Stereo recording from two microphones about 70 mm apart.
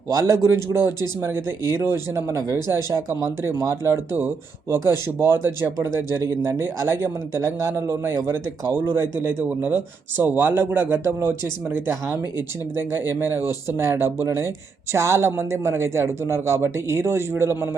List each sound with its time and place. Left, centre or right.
0.2 s speech: right